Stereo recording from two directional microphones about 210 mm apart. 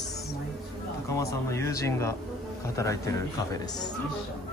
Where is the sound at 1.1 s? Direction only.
15° left (ahead or behind).